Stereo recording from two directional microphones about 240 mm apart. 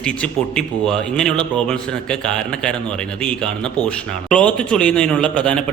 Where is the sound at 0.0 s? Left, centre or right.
Centre.